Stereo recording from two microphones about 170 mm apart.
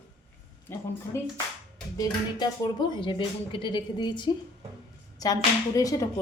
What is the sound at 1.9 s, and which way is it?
Speech, 25° left (ahead or behind).